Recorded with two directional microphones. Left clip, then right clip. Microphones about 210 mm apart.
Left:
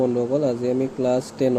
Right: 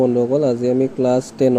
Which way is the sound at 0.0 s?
15° right (ahead or behind).